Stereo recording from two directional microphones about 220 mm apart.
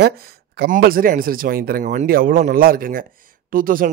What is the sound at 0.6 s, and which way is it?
Speech, 40° right (ahead or behind).